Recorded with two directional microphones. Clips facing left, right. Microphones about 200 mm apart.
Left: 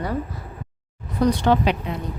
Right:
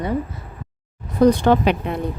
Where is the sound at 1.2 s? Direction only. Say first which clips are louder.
Right 4 dB; 50° right (ahead or behind).